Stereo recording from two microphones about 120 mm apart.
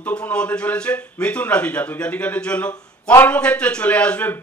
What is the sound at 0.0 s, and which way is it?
Speech, 10° left (ahead or behind).